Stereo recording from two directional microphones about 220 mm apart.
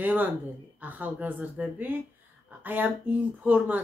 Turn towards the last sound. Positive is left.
turn(degrees=-10)  # may be behind; listen again after turning